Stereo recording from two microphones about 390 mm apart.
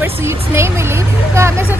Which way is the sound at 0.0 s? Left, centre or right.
Centre.